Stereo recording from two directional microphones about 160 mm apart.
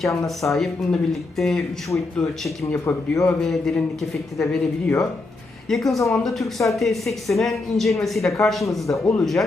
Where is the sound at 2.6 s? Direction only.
15° left (ahead or behind).